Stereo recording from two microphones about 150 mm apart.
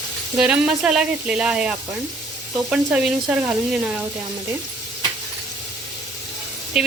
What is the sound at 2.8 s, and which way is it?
Speech, 10° right (ahead or behind).